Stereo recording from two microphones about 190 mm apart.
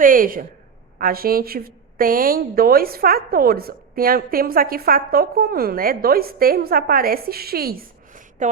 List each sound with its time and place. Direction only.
0.0 s a woman's voice: 45° right (ahead or behind)